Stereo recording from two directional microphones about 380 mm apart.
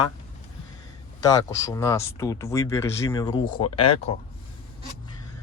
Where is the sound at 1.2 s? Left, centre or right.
Centre.